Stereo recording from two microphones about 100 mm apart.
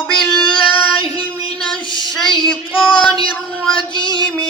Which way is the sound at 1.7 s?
55° left (ahead or behind).